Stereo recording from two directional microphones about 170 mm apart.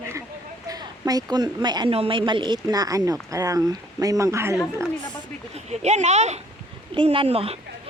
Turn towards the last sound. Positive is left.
turn(degrees=-35)  # may be behind; listen again after turning